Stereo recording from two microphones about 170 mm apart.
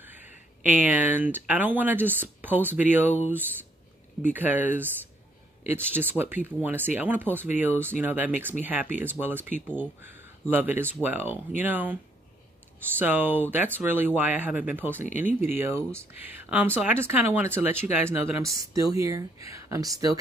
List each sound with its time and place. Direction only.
0.7 s speech: 10° right (ahead or behind)